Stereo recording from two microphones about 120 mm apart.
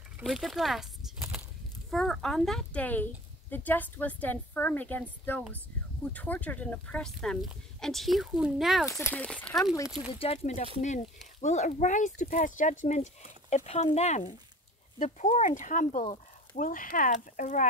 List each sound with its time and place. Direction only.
0.2 s speech: centre (ahead or behind)
6.1 s speech: 15° left (ahead or behind)
9.1 s speech: 10° left (ahead or behind)
10.1 s speech: 55° left (ahead or behind)
10.8 s speech: 80° left
13.7 s speech: 60° left (ahead or behind)
15.0 s speech: 85° left